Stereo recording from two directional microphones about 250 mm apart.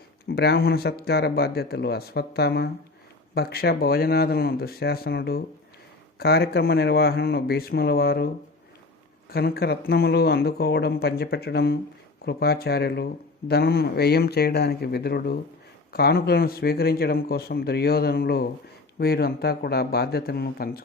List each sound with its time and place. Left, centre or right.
0.3 s speech: left
9.3 s speech: left